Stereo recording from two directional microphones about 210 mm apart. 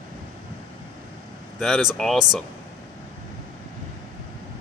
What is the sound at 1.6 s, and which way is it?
Speech, centre (ahead or behind).